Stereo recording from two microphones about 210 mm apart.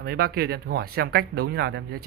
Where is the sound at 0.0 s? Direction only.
50° right (ahead or behind).